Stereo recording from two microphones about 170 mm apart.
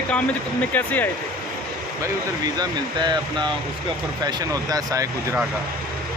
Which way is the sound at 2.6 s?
25° right (ahead or behind).